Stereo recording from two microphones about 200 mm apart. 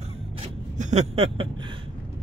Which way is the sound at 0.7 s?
35° right (ahead or behind).